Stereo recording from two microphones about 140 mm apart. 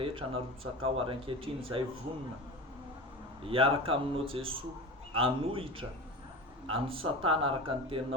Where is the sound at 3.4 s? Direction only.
40° right (ahead or behind).